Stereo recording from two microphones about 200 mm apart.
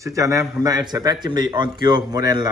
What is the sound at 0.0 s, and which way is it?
A man's voice, 15° right (ahead or behind).